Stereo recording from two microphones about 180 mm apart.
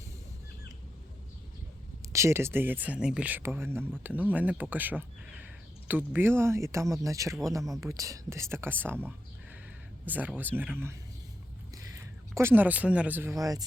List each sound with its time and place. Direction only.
2.1 s speech: 15° right (ahead or behind)
11.9 s speech: 15° right (ahead or behind)